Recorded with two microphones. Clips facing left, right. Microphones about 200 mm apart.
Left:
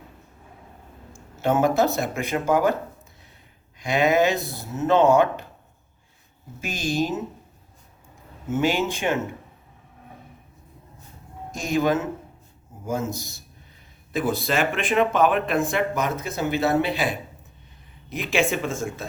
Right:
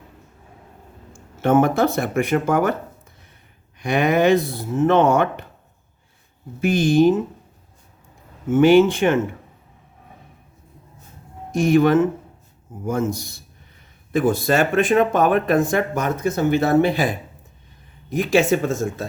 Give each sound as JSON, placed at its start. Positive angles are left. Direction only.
{"t": 1.4, "sound": "speech", "side_deg": -60}
{"t": 3.8, "sound": "speech", "side_deg": -55}
{"t": 6.6, "sound": "speech", "side_deg": -60}
{"t": 8.4, "sound": "speech", "side_deg": -55}
{"t": 11.7, "sound": "speech", "side_deg": -60}
{"t": 18.2, "sound": "speech", "side_deg": -40}